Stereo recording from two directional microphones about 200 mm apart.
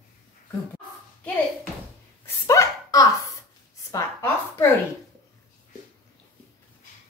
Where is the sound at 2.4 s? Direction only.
15° left (ahead or behind).